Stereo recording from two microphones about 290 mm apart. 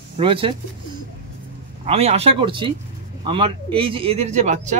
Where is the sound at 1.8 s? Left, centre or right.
Right.